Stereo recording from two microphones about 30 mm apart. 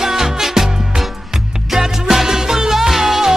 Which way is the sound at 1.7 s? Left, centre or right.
Centre.